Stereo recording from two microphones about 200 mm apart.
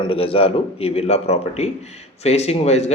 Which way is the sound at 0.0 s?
25° left (ahead or behind).